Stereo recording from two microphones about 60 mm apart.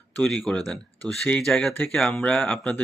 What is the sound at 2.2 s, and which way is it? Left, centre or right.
Speech, left.